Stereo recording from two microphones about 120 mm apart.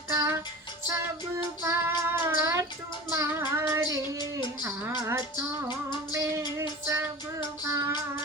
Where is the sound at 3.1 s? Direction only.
20° right (ahead or behind).